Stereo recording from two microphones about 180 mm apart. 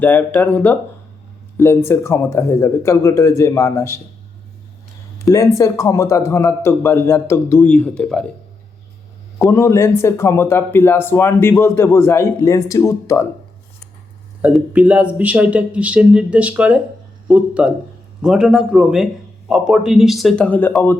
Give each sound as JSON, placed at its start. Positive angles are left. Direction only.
{"t": 0.0, "sound": "speech", "side_deg": 10}
{"t": 5.2, "sound": "speech", "side_deg": 15}
{"t": 9.4, "sound": "speech", "side_deg": 15}
{"t": 14.4, "sound": "a man's voice", "side_deg": -5}